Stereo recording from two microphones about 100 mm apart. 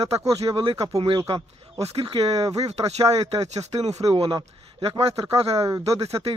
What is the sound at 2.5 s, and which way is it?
Speech, 90° right.